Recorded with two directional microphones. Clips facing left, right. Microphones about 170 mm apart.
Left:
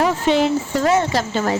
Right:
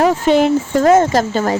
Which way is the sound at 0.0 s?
50° right (ahead or behind).